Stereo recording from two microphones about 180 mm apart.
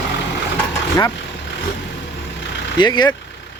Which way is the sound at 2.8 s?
25° left (ahead or behind).